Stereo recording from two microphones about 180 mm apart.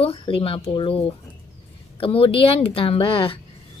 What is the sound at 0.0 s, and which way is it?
A woman's voice, 30° left (ahead or behind).